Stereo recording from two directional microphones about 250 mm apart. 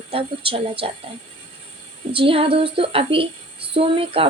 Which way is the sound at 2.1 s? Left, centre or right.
Right.